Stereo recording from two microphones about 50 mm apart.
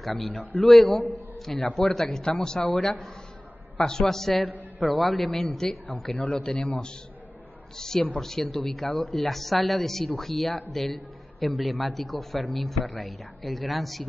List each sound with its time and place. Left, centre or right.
0.0 s speech: centre
0.4 s a man's voice: left
1.8 s speech: centre
2.6 s a man's voice: left
3.7 s a man's voice: centre
5.4 s speech: centre
6.1 s a man's voice: left
7.7 s a man's voice: centre